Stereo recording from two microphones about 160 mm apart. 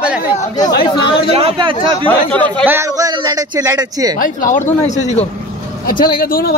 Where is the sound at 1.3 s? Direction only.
35° right (ahead or behind).